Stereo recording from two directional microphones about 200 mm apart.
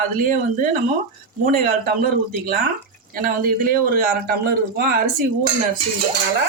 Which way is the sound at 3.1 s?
45° right (ahead or behind).